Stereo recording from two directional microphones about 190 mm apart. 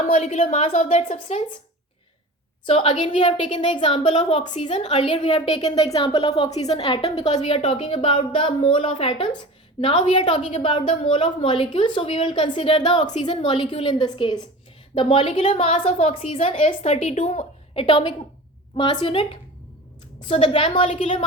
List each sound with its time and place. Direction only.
0.0 s a woman's voice: 40° left (ahead or behind)
2.6 s a woman's voice: 30° left (ahead or behind)